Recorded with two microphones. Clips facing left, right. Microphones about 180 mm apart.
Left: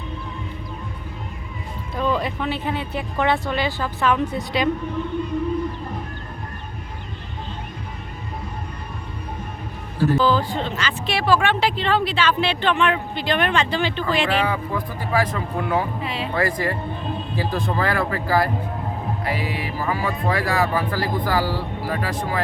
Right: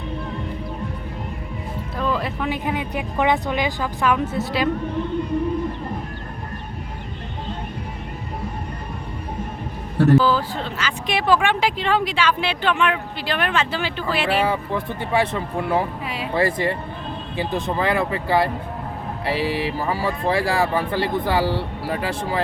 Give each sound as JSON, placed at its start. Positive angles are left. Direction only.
{"t": 2.0, "sound": "music", "side_deg": 0}
{"t": 2.5, "sound": "speech", "side_deg": -15}
{"t": 10.2, "sound": "speech", "side_deg": -5}
{"t": 14.4, "sound": "speech", "side_deg": -25}
{"t": 16.0, "sound": "speech", "side_deg": -10}
{"t": 16.3, "sound": "speech", "side_deg": -25}